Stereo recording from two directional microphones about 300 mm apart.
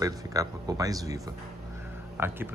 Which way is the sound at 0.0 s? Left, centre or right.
Centre.